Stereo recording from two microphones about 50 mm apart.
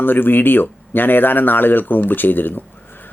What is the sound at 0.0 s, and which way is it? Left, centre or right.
Speech, left.